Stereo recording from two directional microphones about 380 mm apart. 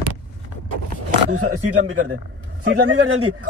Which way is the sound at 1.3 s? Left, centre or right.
Right.